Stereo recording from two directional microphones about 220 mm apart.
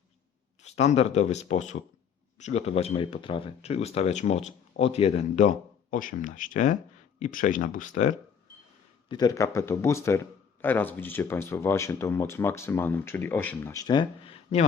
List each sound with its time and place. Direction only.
0.6 s speech: 30° left (ahead or behind)
9.0 s speech: 20° left (ahead or behind)